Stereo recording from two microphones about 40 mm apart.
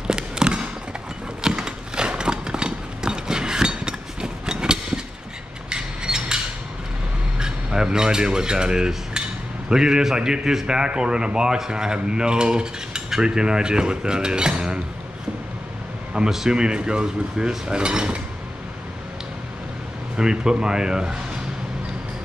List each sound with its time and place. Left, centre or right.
0.0 s a sound: right
1.4 s clip-clop: right
5.7 s mechanisms: right
7.3 s cutlery: centre
9.7 s a man's voice: centre
11.0 s mechanisms: right
16.3 s mechanisms: centre
20.2 s mechanisms: centre